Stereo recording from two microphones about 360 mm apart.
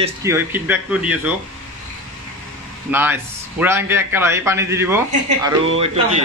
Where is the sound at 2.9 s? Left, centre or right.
Centre.